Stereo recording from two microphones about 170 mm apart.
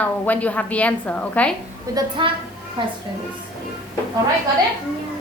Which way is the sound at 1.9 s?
30° right (ahead or behind).